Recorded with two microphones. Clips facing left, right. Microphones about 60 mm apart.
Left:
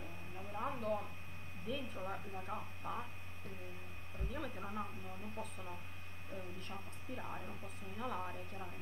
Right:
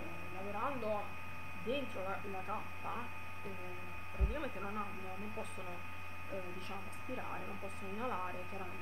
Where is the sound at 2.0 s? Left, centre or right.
Centre.